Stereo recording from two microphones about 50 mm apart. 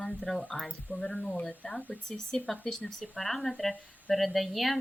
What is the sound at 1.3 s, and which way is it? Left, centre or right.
A woman's voice, left.